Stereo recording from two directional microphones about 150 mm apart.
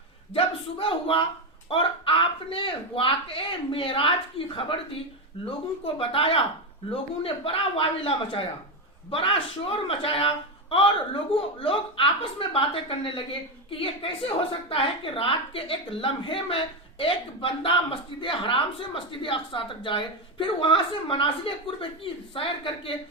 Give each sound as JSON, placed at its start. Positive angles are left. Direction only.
{"t": 0.3, "sound": "a woman's voice", "side_deg": 35}
{"t": 5.8, "sound": "a woman's voice", "side_deg": 35}